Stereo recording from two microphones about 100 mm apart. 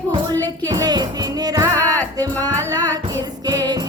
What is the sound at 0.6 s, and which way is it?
Music, 40° right (ahead or behind).